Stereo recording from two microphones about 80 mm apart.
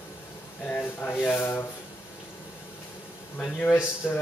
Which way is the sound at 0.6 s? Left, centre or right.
Centre.